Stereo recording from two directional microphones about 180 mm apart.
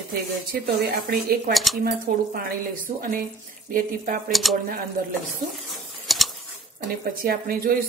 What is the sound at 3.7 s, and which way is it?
Speech, 45° right (ahead or behind).